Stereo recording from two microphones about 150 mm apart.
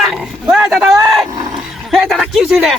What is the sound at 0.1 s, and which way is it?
Roaring cats, centre (ahead or behind).